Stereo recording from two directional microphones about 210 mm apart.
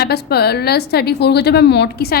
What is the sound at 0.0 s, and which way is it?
A woman's voice, 50° left (ahead or behind).